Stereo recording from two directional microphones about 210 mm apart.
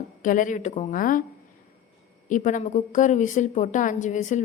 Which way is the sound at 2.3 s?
35° left (ahead or behind).